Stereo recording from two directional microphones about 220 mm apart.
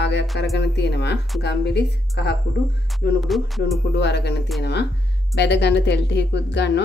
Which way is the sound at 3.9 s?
50° left (ahead or behind).